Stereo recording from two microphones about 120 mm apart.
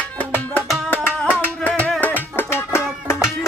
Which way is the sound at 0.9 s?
15° left (ahead or behind).